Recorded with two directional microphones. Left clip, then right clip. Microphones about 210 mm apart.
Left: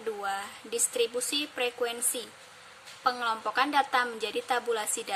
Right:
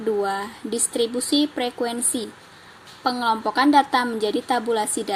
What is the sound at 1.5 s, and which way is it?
Speech, 15° left (ahead or behind).